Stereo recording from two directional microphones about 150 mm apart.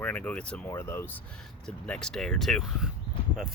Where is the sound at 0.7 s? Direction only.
15° left (ahead or behind).